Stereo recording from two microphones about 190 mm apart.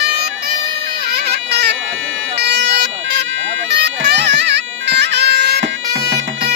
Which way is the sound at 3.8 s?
60° right (ahead or behind).